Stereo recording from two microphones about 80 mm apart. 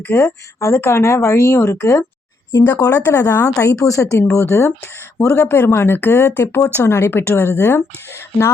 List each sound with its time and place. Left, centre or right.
0.1 s speech: left
2.9 s speech: left
3.7 s a woman's voice: left
5.2 s speech: left